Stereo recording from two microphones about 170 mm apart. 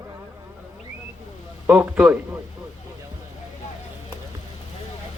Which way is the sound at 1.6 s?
10° right (ahead or behind).